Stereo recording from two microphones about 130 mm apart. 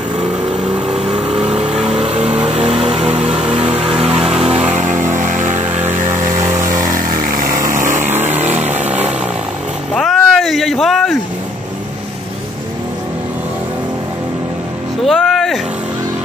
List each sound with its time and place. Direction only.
0.8 s vehicle: 5° right (ahead or behind)
2.0 s vehicle: 55° right (ahead or behind)
2.8 s music: 50° right (ahead or behind)
4.2 s vehicle: 5° right (ahead or behind)
4.6 s vehicle: 70° right (ahead or behind)
6.4 s vehicle: 20° right (ahead or behind)
7.2 s vehicle: 90° right
7.8 s vehicle: 75° right (ahead or behind)
8.2 s vehicle: 60° right (ahead or behind)
9.9 s a sound: centre (ahead or behind)
15.0 s vehicle: centre (ahead or behind)